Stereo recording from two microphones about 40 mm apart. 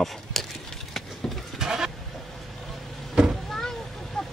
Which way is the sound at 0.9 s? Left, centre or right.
Centre.